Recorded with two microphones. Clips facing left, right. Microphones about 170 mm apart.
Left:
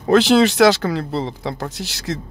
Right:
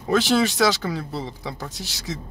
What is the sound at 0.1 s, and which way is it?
Speech, 75° left (ahead or behind).